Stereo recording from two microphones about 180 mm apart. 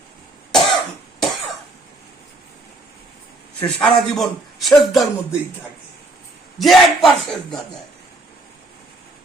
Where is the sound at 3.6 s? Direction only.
5° left (ahead or behind).